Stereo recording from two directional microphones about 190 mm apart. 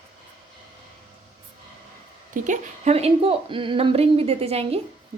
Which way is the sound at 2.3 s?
40° right (ahead or behind).